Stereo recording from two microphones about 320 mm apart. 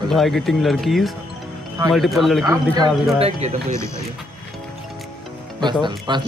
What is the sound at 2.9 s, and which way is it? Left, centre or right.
Speech, centre.